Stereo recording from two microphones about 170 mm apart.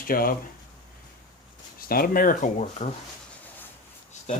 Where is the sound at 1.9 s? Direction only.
60° left (ahead or behind).